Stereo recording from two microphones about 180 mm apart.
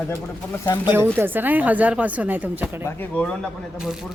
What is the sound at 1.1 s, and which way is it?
Speech, 10° right (ahead or behind).